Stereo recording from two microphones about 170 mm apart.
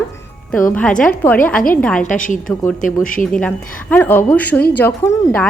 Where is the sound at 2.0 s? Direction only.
50° left (ahead or behind).